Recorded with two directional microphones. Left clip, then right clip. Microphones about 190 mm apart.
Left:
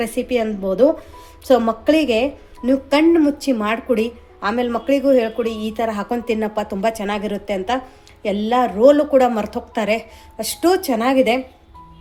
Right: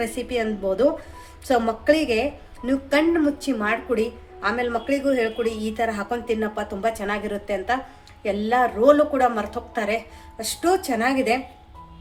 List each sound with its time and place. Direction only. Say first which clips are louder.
0.0 s a woman's voice: left 5 dB; 30° left (ahead or behind)